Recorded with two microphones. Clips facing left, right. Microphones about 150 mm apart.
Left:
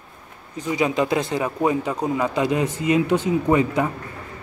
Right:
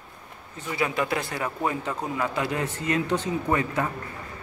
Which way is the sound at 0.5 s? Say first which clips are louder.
Left 6 dB; 15° left (ahead or behind).